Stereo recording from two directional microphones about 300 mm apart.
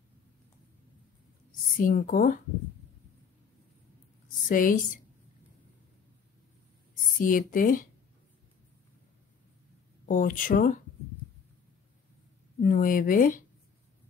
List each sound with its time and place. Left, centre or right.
1.8 s speech: left
4.5 s speech: left
7.2 s speech: left
10.0 s speech: left
12.5 s speech: left